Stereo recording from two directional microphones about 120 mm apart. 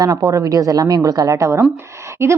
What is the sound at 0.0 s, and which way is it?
A woman's voice, 30° right (ahead or behind).